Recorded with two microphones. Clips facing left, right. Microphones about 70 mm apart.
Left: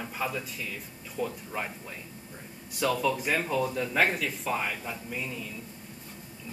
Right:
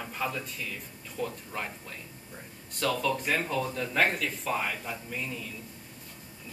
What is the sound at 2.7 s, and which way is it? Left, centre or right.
Speech, centre.